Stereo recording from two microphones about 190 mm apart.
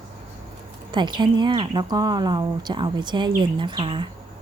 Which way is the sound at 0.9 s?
25° right (ahead or behind).